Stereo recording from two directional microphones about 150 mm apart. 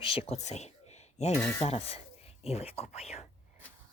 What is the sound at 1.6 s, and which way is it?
Speech, 40° left (ahead or behind).